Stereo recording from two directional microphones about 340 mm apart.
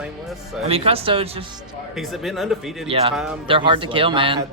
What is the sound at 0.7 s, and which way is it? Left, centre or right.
Speech, centre.